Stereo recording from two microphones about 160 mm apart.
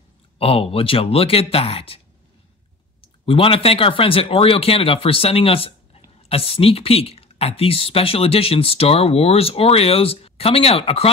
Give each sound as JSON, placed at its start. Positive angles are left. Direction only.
{"t": 0.4, "sound": "speech", "side_deg": 35}
{"t": 3.3, "sound": "speech", "side_deg": 35}